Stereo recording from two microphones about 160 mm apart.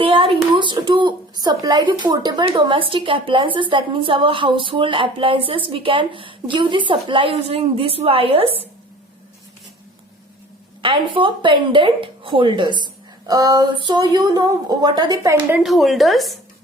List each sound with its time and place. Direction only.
0.0 s a sound: 35° right (ahead or behind)
0.5 s a woman's voice: 30° right (ahead or behind)
10.8 s a woman's voice: 30° right (ahead or behind)
15.4 s speech: 5° right (ahead or behind)